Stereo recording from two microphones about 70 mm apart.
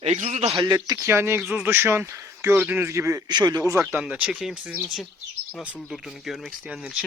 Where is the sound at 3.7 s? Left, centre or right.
Right.